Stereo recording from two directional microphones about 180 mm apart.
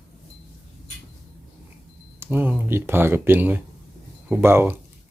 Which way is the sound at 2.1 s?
10° right (ahead or behind).